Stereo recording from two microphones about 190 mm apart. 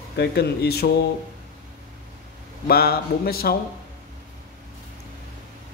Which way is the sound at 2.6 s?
55° left (ahead or behind).